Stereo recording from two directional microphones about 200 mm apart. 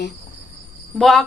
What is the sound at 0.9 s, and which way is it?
Speech, centre (ahead or behind).